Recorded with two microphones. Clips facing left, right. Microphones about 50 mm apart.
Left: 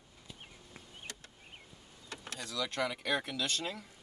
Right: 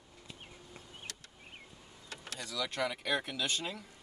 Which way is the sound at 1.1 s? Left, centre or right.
Left.